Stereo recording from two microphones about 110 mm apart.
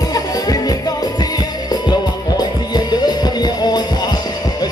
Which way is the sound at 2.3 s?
40° left (ahead or behind).